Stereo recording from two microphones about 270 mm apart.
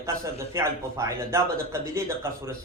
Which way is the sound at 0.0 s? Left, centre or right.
Centre.